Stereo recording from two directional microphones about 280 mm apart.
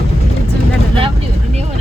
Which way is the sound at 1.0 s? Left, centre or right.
Right.